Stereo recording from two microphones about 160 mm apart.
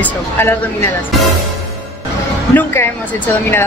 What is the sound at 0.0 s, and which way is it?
Speech, 15° left (ahead or behind).